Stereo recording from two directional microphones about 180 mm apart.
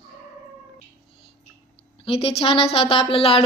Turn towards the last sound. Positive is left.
turn(degrees=30)  # may be behind; listen again after turning